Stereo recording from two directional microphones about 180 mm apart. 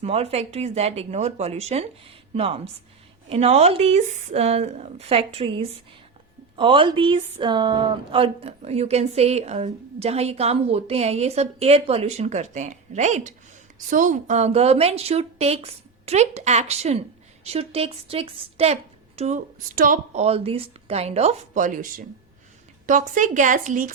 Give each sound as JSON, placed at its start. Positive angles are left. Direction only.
{"t": 0.0, "sound": "a woman's voice", "side_deg": -35}